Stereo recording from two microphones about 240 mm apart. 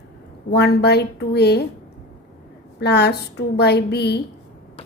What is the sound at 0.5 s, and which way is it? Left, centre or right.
A woman's voice, left.